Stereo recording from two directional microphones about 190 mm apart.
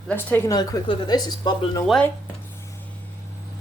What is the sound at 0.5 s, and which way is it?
Speech, 20° left (ahead or behind).